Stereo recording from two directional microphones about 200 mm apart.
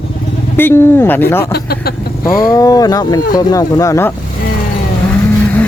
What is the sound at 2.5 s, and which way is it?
Speech, 15° left (ahead or behind).